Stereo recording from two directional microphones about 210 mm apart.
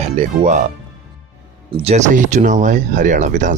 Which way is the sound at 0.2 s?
35° right (ahead or behind).